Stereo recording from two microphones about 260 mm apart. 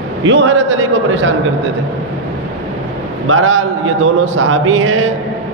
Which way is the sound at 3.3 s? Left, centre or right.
Right.